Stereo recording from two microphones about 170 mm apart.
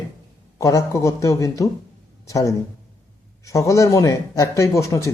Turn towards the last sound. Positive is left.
turn(degrees=15)  # may be behind; listen again after turning